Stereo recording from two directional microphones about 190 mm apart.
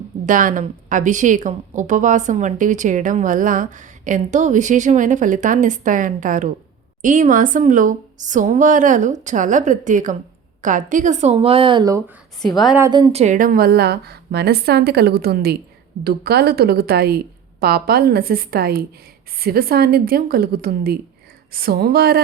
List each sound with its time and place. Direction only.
0.3 s speech: 45° right (ahead or behind); by 12.0 s 20° right (ahead or behind)
12.5 s a woman's voice: centre (ahead or behind)
12.8 s a woman's voice: 25° right (ahead or behind); by 22.2 s 55° right (ahead or behind)